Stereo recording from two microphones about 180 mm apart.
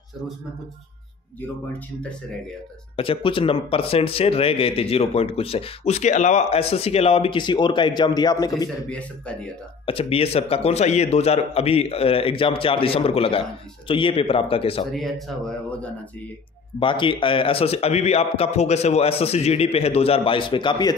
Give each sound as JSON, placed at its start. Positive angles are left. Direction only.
{"t": 3.0, "sound": "speech", "side_deg": 30}
{"t": 8.8, "sound": "a man's voice", "side_deg": 5}
{"t": 9.8, "sound": "speech", "side_deg": 30}
{"t": 14.9, "sound": "speech", "side_deg": 0}
{"t": 16.8, "sound": "speech", "side_deg": 25}